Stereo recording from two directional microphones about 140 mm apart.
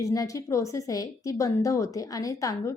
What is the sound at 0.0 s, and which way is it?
Speech, 25° left (ahead or behind).